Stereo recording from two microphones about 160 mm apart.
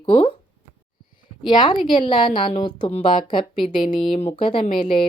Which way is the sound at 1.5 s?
25° left (ahead or behind).